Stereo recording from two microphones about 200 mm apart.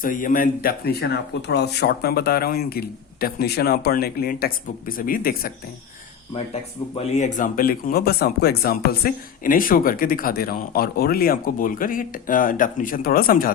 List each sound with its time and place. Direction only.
0.0 s speech: 40° left (ahead or behind)
7.1 s speech: 35° left (ahead or behind)